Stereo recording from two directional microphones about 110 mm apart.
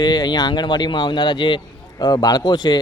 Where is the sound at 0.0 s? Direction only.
40° left (ahead or behind).